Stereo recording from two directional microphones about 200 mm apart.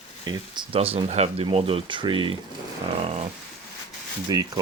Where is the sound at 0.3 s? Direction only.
30° right (ahead or behind).